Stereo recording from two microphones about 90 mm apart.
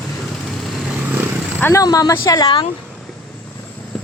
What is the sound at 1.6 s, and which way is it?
Speech, 30° left (ahead or behind).